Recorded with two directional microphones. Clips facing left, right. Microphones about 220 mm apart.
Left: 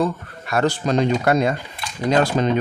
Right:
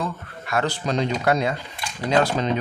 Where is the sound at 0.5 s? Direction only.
45° left (ahead or behind).